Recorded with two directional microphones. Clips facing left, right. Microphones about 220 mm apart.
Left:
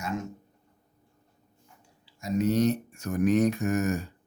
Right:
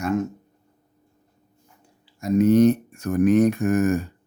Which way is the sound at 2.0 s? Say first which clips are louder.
Right 8 dB; 55° right (ahead or behind).